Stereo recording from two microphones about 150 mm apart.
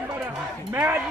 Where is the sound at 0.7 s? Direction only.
15° right (ahead or behind).